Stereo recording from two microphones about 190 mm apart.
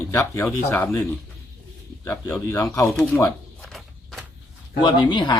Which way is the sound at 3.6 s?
Centre (ahead or behind).